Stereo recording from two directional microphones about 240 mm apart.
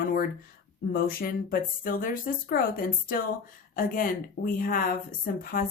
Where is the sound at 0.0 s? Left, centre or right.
Left.